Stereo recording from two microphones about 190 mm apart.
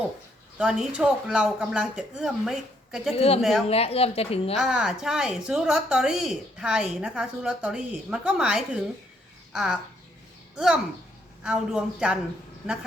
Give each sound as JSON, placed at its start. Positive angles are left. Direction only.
{"t": 0.6, "sound": "speech", "side_deg": -5}
{"t": 3.2, "sound": "a woman's voice", "side_deg": 30}
{"t": 4.5, "sound": "speech", "side_deg": -5}
{"t": 11.4, "sound": "speech", "side_deg": -5}